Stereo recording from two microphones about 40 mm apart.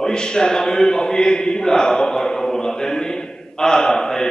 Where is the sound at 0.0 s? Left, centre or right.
Centre.